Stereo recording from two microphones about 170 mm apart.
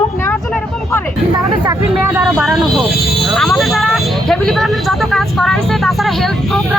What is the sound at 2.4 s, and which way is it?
Vehicle, centre (ahead or behind).